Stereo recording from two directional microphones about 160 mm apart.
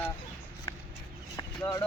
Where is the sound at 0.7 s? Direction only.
25° left (ahead or behind).